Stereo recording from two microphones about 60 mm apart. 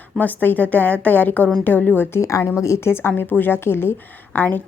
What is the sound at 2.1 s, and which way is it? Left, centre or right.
Speech, left.